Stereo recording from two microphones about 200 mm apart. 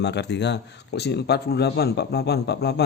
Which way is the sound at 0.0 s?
60° left (ahead or behind).